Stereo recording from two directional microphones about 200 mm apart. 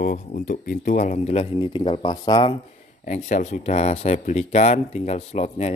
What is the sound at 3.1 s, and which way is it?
Speech, 35° left (ahead or behind).